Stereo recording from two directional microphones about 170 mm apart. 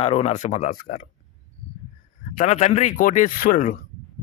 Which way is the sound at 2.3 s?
40° left (ahead or behind).